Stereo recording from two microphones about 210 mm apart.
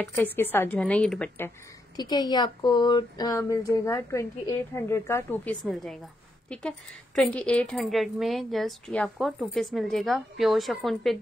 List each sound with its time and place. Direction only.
0.0 s speech: 10° left (ahead or behind)
2.0 s speech: 20° left (ahead or behind); by 5.9 s centre (ahead or behind)
7.2 s speech: 5° left (ahead or behind)